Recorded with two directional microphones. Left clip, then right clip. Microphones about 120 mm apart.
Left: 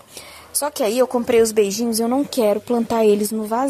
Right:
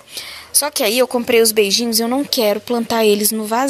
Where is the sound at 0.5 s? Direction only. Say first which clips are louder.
Right 3 dB; 5° left (ahead or behind).